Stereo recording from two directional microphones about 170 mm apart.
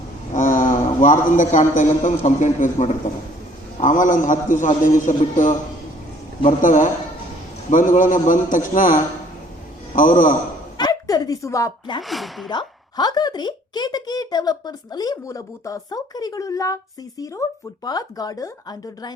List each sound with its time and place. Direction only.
0.3 s a sound: 50° left (ahead or behind)
0.7 s a man's voice: 50° left (ahead or behind)
10.8 s a woman's voice: 20° left (ahead or behind)
12.0 s speech: centre (ahead or behind)
12.5 s a woman's voice: 25° left (ahead or behind)